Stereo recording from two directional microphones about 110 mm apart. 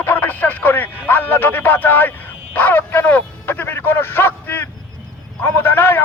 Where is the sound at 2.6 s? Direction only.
15° left (ahead or behind).